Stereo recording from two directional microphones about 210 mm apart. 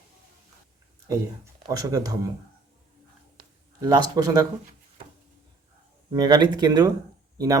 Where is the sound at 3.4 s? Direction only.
20° right (ahead or behind).